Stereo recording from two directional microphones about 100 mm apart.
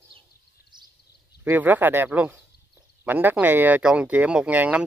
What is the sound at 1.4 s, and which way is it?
Speech, 15° right (ahead or behind).